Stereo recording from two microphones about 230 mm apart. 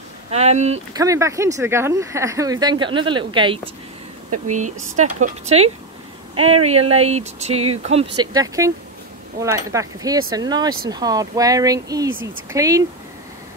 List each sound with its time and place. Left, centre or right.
0.3 s speech: right
0.9 s speech: centre
4.5 s speech: right; by 12.1 s centre
12.1 s speech: right
12.5 s speech: centre